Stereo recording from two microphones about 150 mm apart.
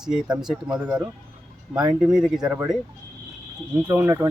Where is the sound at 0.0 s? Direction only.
5° right (ahead or behind).